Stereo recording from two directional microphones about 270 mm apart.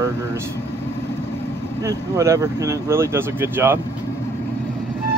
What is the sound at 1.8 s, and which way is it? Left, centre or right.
Speech, centre.